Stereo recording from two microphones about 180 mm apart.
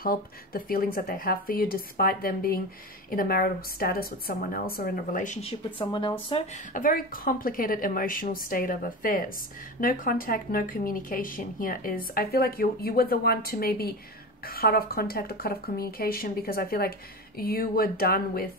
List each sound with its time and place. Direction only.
0.0 s speech: 55° left (ahead or behind); by 6.6 s 30° left (ahead or behind)
6.7 s speech: 50° left (ahead or behind)